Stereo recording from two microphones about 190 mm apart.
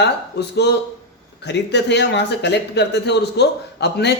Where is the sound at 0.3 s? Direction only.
60° left (ahead or behind).